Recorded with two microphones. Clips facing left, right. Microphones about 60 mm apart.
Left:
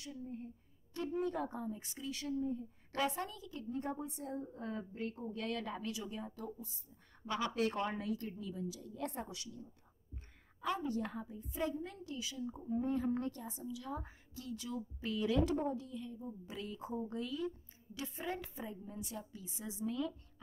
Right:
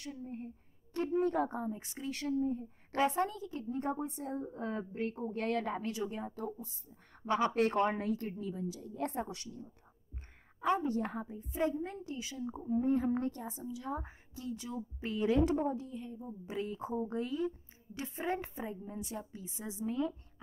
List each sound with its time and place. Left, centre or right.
0.0 s a woman's voice: right
2.9 s a woman's voice: right